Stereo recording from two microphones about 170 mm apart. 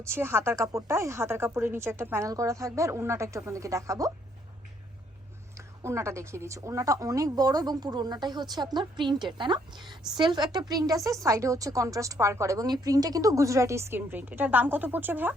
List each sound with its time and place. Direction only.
0.0 s speech: 15° right (ahead or behind)
5.5 s a woman's voice: 15° right (ahead or behind)